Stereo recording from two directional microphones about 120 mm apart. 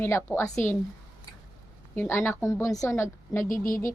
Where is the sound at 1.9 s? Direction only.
20° left (ahead or behind).